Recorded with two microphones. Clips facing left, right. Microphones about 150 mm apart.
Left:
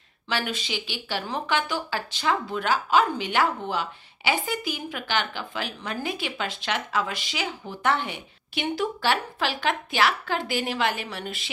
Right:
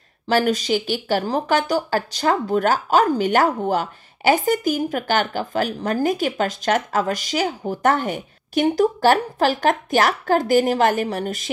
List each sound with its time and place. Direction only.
0.3 s speech: 40° right (ahead or behind)